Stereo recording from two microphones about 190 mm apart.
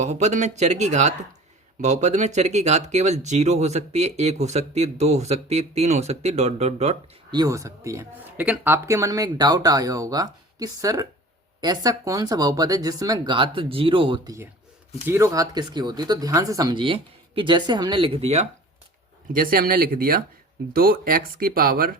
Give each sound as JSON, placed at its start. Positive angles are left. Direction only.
{"t": 0.0, "sound": "speech", "side_deg": -40}
{"t": 7.3, "sound": "speech", "side_deg": -20}
{"t": 15.0, "sound": "speech", "side_deg": -15}
{"t": 19.3, "sound": "speech", "side_deg": -50}